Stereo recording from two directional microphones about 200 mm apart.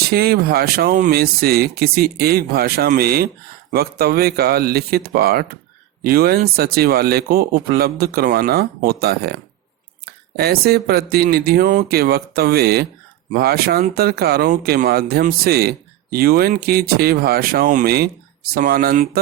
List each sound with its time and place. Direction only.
0.0 s speech: 50° right (ahead or behind)